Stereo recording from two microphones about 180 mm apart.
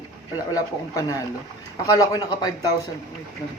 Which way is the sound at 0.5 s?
20° left (ahead or behind).